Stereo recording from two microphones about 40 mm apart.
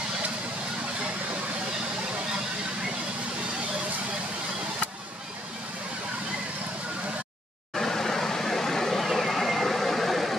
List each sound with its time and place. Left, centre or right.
7.7 s vehicle: centre